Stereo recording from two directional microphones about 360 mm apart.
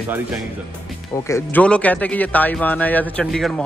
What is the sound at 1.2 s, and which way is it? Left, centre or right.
Speech, centre.